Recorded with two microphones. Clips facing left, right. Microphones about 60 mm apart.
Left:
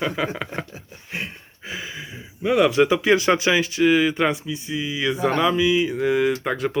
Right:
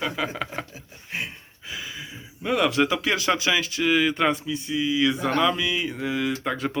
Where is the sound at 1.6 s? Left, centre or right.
Left.